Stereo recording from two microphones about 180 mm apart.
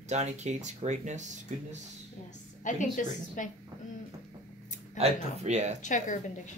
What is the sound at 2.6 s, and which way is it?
Speech, 45° left (ahead or behind).